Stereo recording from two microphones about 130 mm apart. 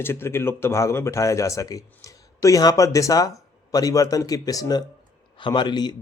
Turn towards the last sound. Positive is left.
turn(degrees=35)  # may be behind; listen again after turning